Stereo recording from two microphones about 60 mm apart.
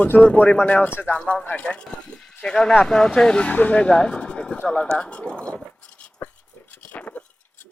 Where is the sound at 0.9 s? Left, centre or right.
Left.